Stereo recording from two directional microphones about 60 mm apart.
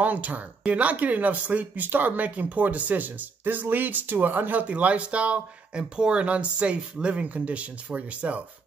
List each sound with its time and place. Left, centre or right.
0.0 s speech: right